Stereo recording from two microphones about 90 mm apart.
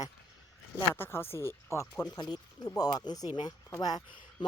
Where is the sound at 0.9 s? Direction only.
25° left (ahead or behind).